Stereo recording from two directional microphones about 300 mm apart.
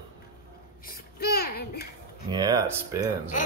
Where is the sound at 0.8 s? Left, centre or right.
Left.